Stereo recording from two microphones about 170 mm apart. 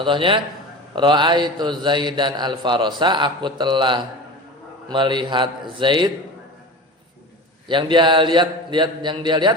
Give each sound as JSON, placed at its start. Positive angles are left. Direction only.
{"t": 0.0, "sound": "a man's voice", "side_deg": -30}
{"t": 7.7, "sound": "a man's voice", "side_deg": -30}